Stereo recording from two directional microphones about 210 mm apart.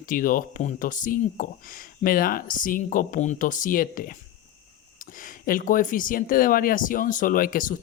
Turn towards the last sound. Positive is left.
turn(degrees=40)  # may be behind; listen again after turning